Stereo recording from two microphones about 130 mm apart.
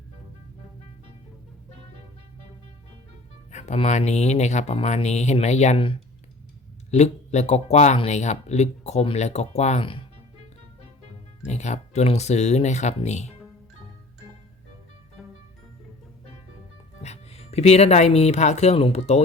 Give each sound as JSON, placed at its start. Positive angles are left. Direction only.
{"t": 3.5, "sound": "music", "side_deg": 60}
{"t": 3.8, "sound": "speech", "side_deg": 60}
{"t": 6.9, "sound": "speech", "side_deg": 60}
{"t": 11.4, "sound": "speech", "side_deg": 60}
{"t": 15.2, "sound": "music", "side_deg": 0}
{"t": 17.0, "sound": "speech", "side_deg": 55}